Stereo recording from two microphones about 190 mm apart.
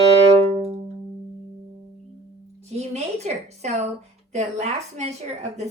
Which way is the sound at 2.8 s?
35° right (ahead or behind).